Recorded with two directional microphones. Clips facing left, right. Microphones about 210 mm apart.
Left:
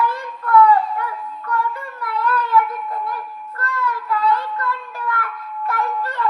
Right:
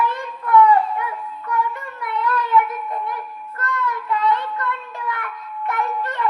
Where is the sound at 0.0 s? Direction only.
20° right (ahead or behind).